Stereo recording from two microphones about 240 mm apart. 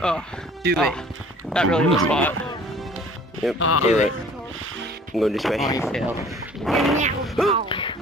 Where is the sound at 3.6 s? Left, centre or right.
Left.